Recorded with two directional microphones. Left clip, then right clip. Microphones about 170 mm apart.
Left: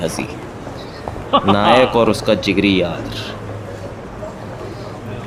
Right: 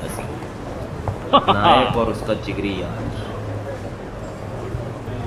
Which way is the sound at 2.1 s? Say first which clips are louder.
Left 8 dB; 75° left (ahead or behind).